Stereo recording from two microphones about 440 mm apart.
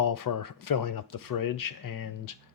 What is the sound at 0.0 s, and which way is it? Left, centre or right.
Speech, left.